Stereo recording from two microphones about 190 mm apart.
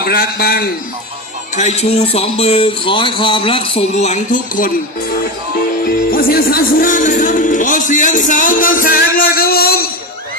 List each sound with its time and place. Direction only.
0.0 s speech: 50° left (ahead or behind)
1.5 s speech: 35° left (ahead or behind)
5.8 s speech: 50° left (ahead or behind)